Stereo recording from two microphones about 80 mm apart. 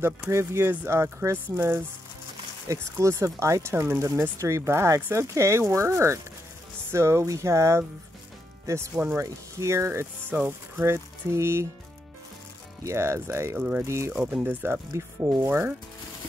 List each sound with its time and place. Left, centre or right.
0.0 s speech: right
12.8 s speech: right
13.6 s speech: centre
13.8 s speech: right